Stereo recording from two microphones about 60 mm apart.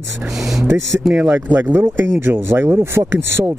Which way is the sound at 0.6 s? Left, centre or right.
Right.